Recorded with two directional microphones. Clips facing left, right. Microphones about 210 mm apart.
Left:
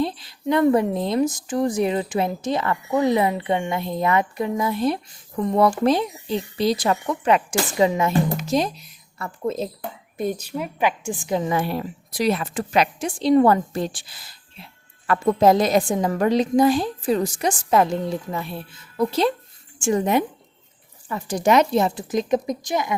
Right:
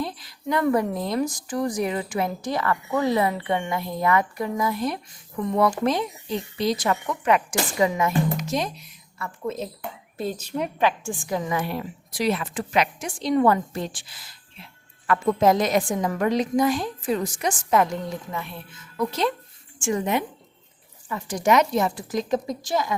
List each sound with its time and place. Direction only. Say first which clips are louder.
0.0 s a woman's voice: left 6 dB; 25° left (ahead or behind)
10.2 s a woman's voice: left 2 dB; 15° left (ahead or behind)
11.3 s a woman's voice: left 4 dB; 25° left (ahead or behind)